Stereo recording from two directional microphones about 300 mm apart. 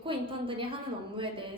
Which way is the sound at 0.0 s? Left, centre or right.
Centre.